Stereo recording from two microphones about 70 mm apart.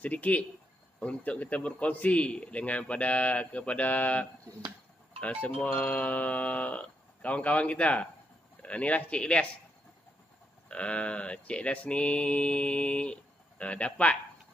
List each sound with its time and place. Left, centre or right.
0.0 s a man's voice: left
8.6 s mantra: centre
10.7 s mantra: centre